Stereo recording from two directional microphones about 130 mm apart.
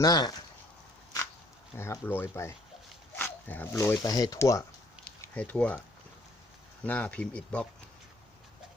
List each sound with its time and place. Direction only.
0.0 s speech: 30° left (ahead or behind)
1.7 s speech: 20° left (ahead or behind)
5.3 s speech: 10° left (ahead or behind)
6.8 s speech: 10° left (ahead or behind)